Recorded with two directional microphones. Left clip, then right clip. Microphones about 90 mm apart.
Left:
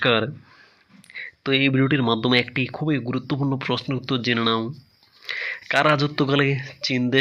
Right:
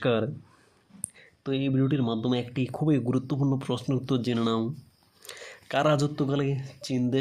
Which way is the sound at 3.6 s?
20° right (ahead or behind).